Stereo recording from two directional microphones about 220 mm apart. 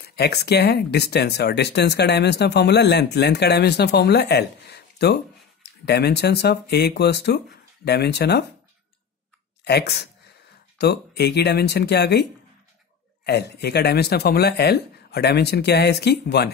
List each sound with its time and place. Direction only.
0.0 s speech: 45° left (ahead or behind)
9.7 s speech: 50° left (ahead or behind)